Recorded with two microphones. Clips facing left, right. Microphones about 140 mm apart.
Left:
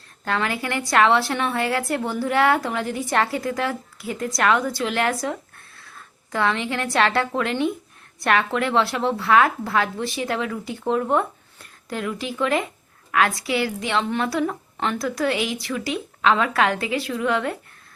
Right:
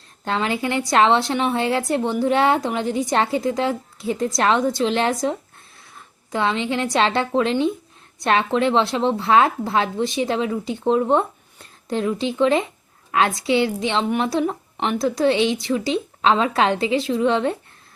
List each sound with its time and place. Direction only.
0.3 s a woman's voice: 20° right (ahead or behind)